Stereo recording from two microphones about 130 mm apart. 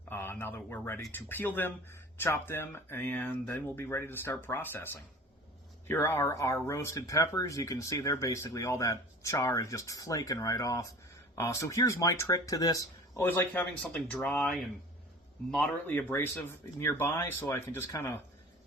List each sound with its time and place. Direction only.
0.1 s a man's voice: 15° left (ahead or behind)
5.9 s speech: 20° left (ahead or behind)
15.9 s a man's voice: 15° left (ahead or behind)